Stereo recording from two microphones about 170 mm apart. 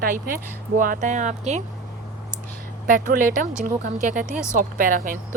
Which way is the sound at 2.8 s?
50° right (ahead or behind).